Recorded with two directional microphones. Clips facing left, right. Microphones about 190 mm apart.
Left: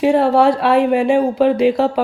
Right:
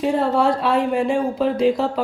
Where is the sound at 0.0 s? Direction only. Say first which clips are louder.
Left 6 dB; 70° left (ahead or behind).